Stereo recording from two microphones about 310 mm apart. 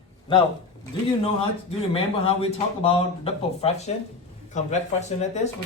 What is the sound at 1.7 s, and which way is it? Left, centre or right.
A man's voice, centre.